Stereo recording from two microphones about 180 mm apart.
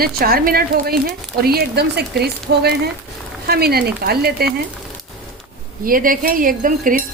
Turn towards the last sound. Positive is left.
turn(degrees=-50)  # may be behind; listen again after turning